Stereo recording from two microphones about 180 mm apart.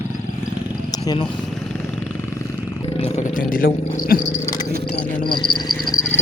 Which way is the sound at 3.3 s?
50° left (ahead or behind).